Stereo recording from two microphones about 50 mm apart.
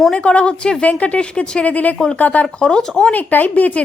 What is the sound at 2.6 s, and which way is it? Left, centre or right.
Speech, centre.